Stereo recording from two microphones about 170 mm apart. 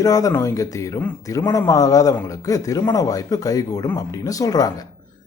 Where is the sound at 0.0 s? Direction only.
20° left (ahead or behind).